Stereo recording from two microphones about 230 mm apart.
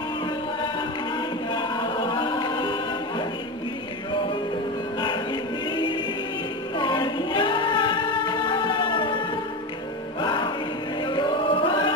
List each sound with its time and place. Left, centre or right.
1.5 s a capella: centre
5.0 s music: centre
10.2 s music: centre
11.1 s chant: left